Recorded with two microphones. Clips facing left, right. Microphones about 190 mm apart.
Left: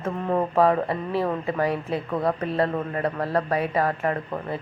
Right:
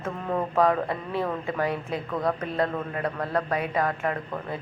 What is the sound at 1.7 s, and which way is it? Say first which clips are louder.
Speech: left 3 dB; 35° left (ahead or behind).